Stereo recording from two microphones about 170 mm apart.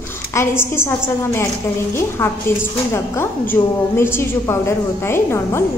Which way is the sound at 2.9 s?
15° left (ahead or behind).